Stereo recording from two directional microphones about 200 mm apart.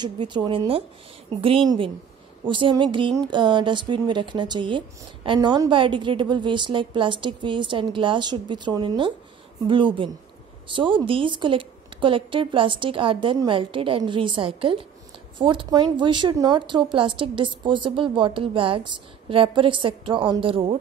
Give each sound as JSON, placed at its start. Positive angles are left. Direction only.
{"t": 0.0, "sound": "speech", "side_deg": -20}
{"t": 2.4, "sound": "speech", "side_deg": -25}